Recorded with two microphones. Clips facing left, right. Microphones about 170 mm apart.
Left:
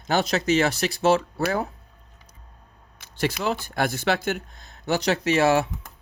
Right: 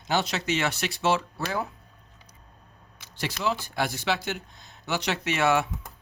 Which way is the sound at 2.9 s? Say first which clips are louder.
Left 7 dB; 50° left (ahead or behind).